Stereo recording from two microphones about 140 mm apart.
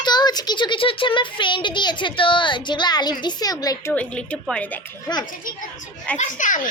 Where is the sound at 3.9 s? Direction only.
10° left (ahead or behind).